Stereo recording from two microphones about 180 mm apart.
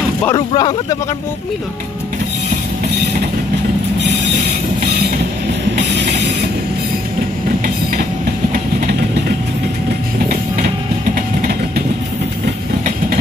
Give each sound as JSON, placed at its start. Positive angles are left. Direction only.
{"t": 0.5, "sound": "speech", "side_deg": 25}